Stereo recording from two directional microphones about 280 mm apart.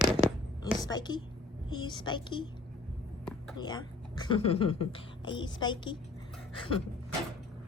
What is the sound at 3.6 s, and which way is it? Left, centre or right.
A woman's voice, centre.